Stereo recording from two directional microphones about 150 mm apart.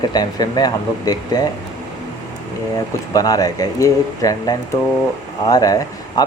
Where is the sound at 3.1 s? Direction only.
25° left (ahead or behind).